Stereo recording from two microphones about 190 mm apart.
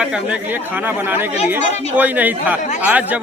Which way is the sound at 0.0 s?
5° right (ahead or behind).